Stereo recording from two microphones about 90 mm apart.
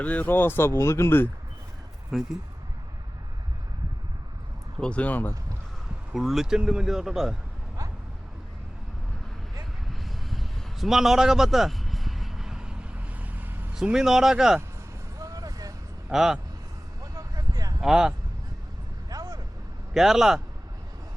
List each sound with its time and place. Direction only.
0.0 s speech: 15° left (ahead or behind)
2.1 s speech: 5° right (ahead or behind)
4.8 s speech: 15° left (ahead or behind)
6.1 s speech: 5° right (ahead or behind)
10.0 s a sound: centre (ahead or behind); by 13.7 s 20° right (ahead or behind)
13.7 s speech: 5° right (ahead or behind)
15.2 s vehicle: 40° right (ahead or behind)
16.0 s speech: 5° right (ahead or behind)
17.0 s a sound: 45° right (ahead or behind)
17.7 s speech: 5° right (ahead or behind)
19.1 s vehicle: 45° right (ahead or behind)
19.9 s speech: 5° right (ahead or behind)